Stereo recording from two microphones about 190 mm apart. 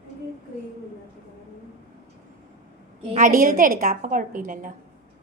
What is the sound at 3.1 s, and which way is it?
A woman's voice, 45° right (ahead or behind).